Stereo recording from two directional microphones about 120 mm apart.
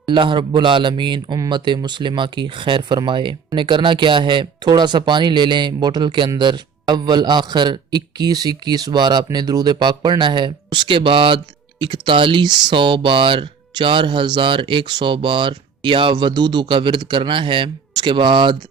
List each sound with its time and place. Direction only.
0.0 s a man's voice: 45° right (ahead or behind)